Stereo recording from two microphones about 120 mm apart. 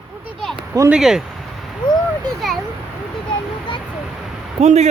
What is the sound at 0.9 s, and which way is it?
Speech, 5° right (ahead or behind).